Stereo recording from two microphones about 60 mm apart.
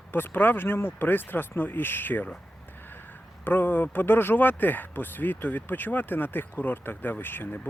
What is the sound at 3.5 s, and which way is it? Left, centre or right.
Speech, left.